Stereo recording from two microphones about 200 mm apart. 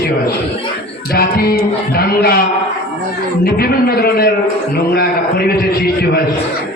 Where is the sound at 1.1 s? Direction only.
50° left (ahead or behind).